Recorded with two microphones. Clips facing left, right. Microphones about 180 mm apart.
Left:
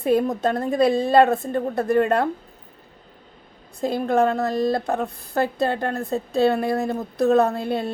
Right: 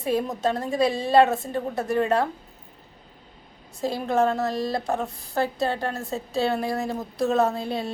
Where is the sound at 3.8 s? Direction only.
55° left (ahead or behind).